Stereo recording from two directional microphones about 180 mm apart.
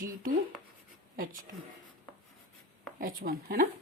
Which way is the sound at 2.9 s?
50° right (ahead or behind).